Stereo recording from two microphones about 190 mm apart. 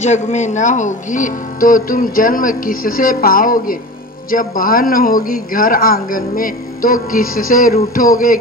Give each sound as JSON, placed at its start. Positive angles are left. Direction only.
{"t": 0.0, "sound": "speech", "side_deg": 40}